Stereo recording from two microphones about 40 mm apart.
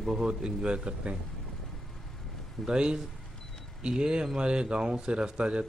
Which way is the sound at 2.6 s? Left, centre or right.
Right.